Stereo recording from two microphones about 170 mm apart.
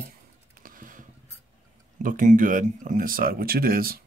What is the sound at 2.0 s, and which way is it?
Speech, 50° right (ahead or behind).